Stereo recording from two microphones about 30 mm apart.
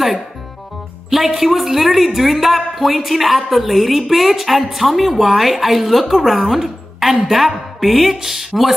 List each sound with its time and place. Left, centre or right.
1.1 s a woman's voice: centre